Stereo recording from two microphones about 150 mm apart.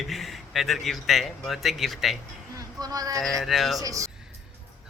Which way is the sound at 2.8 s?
25° right (ahead or behind).